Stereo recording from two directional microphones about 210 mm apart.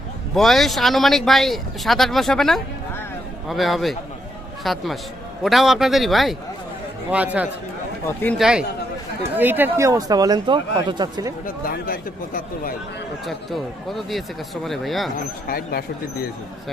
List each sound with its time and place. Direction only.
0.3 s speech: centre (ahead or behind)
8.0 s speech: 10° left (ahead or behind)
8.4 s speech: 5° right (ahead or behind)
11.4 s speech: 45° left (ahead or behind)
13.2 s speech: centre (ahead or behind)
15.4 s speech: 45° left (ahead or behind)